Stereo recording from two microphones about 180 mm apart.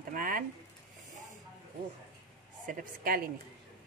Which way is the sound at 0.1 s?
50° right (ahead or behind).